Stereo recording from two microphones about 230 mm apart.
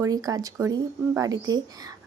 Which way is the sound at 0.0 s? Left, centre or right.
Centre.